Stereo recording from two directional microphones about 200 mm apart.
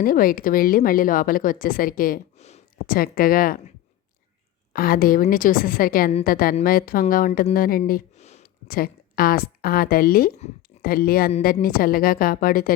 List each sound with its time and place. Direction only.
0.0 s a woman's voice: 45° left (ahead or behind)
4.7 s a woman's voice: 45° left (ahead or behind)
8.6 s a woman's voice: 50° left (ahead or behind)